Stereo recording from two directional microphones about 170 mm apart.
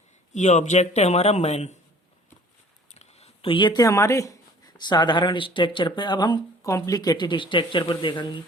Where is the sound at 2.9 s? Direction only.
40° left (ahead or behind).